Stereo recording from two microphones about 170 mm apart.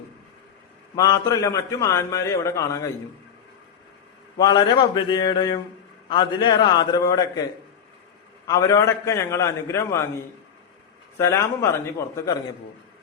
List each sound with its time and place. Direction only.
0.9 s a man's voice: 20° left (ahead or behind)
4.4 s a man's voice: 25° left (ahead or behind)
8.4 s a man's voice: 20° left (ahead or behind)
11.2 s a man's voice: 15° left (ahead or behind)